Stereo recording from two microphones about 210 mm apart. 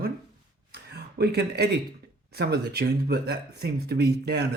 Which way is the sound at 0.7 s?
50° right (ahead or behind).